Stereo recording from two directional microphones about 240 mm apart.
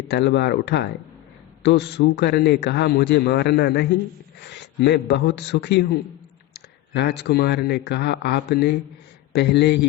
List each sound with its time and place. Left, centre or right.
0.1 s a man's voice: left